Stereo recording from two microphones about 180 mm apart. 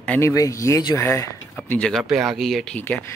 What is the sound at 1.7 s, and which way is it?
Speech, 5° left (ahead or behind).